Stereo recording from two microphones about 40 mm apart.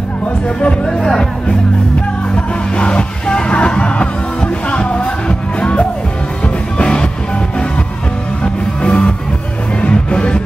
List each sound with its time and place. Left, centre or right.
0.8 s speech: centre
2.3 s music: left
8.8 s music: left